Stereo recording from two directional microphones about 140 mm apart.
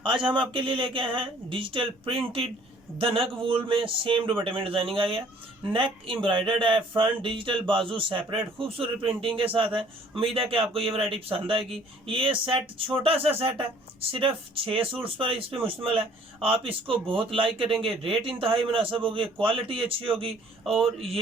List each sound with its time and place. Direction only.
0.0 s a man's voice: 35° right (ahead or behind)